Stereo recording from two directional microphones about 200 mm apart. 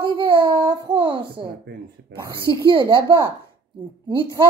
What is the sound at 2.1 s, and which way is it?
Speech, 65° right (ahead or behind).